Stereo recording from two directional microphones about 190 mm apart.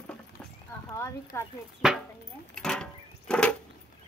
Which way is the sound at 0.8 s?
15° left (ahead or behind).